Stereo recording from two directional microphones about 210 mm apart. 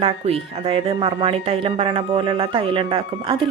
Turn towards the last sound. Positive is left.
turn(degrees=-25)  # may be behind; listen again after turning